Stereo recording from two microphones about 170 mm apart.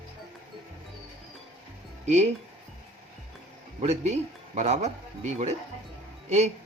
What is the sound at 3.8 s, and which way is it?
Speech, 40° right (ahead or behind).